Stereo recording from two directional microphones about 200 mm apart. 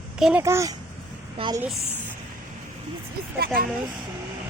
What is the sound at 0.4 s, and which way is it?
A woman's voice, 15° right (ahead or behind).